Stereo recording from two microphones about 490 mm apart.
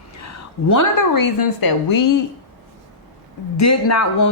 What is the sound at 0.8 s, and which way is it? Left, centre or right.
A woman's voice, left.